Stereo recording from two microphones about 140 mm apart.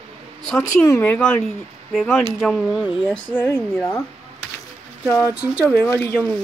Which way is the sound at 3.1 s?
10° left (ahead or behind).